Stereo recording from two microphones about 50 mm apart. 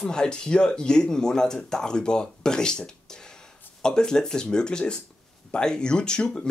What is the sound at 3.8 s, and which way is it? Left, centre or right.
Speech, centre.